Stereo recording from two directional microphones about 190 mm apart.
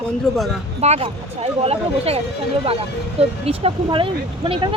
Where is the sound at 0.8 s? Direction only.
30° right (ahead or behind).